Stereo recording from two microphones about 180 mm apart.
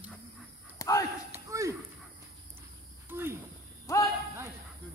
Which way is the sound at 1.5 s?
15° right (ahead or behind).